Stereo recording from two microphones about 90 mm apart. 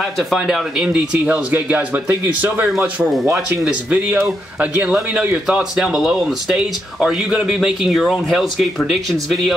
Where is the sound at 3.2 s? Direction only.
35° right (ahead or behind).